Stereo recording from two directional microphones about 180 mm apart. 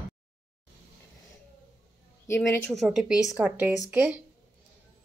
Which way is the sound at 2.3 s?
15° left (ahead or behind).